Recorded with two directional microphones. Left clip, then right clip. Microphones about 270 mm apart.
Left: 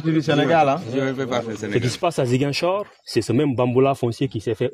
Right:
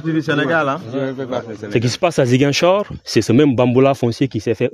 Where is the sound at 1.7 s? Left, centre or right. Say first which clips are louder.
Right 6 dB; right.